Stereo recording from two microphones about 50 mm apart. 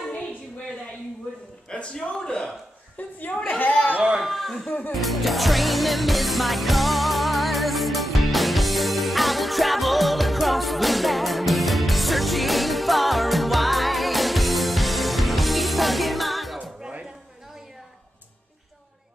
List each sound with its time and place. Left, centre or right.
1.7 s a man's voice: centre
3.0 s music: left
3.5 s chatter: left
4.2 s speech: centre
4.6 s music: left
4.9 s music: centre